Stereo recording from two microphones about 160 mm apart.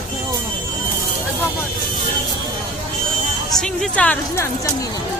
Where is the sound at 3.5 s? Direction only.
5° left (ahead or behind).